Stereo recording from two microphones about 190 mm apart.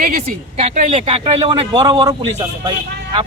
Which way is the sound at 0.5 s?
35° right (ahead or behind).